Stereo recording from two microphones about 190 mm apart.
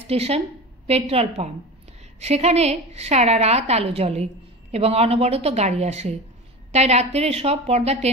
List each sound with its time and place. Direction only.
0.0 s a woman's voice: 30° right (ahead or behind)